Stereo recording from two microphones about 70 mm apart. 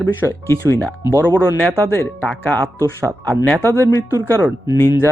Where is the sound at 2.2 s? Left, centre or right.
Left.